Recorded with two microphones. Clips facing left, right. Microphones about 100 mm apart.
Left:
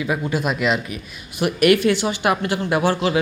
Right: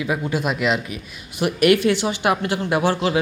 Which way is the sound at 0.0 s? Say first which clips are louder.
Even; 15° right (ahead or behind).